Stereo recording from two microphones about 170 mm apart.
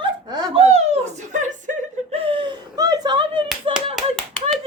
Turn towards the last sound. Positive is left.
turn(degrees=5)  # may be behind; listen again after turning